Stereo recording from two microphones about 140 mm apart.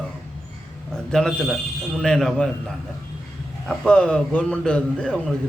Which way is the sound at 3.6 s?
5° left (ahead or behind).